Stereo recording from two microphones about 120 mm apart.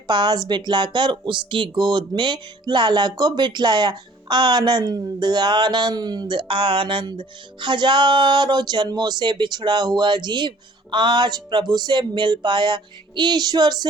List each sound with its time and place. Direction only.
0.1 s speech: 35° right (ahead or behind)